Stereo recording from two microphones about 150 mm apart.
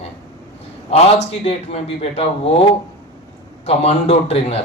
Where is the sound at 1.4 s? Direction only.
40° left (ahead or behind).